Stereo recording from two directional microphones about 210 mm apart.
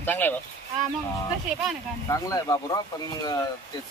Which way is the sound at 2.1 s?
15° left (ahead or behind).